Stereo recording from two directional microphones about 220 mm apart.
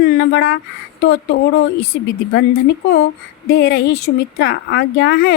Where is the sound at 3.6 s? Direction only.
50° left (ahead or behind).